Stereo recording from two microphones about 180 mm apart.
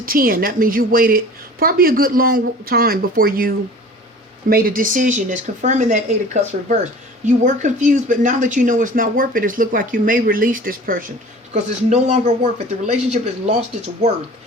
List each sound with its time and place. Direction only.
0.0 s speech: 55° right (ahead or behind)
11.5 s speech: 40° right (ahead or behind)